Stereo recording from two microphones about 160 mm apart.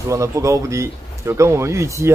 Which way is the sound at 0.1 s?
20° right (ahead or behind).